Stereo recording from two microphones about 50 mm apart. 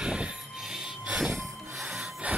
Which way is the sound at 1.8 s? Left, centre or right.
Centre.